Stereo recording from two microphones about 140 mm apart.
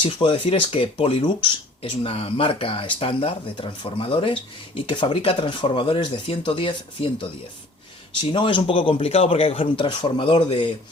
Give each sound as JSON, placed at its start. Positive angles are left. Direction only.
{"t": 0.0, "sound": "speech", "side_deg": 35}